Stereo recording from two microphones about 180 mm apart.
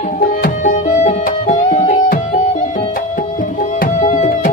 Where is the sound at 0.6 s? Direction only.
45° left (ahead or behind).